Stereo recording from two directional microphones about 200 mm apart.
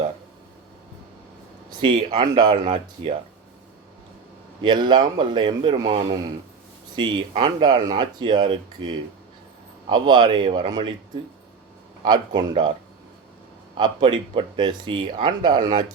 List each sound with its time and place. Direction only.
2.0 s speech: 25° right (ahead or behind)
4.6 s speech: 20° right (ahead or behind)
12.0 s speech: 20° right (ahead or behind)
13.7 s speech: 25° right (ahead or behind)